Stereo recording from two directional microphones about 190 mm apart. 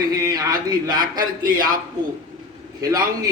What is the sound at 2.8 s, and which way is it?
Speech, 20° right (ahead or behind).